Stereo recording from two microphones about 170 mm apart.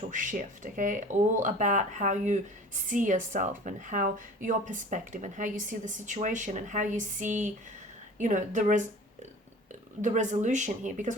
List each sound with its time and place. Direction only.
0.1 s a woman's voice: 50° right (ahead or behind)
10.0 s a woman's voice: 45° right (ahead or behind)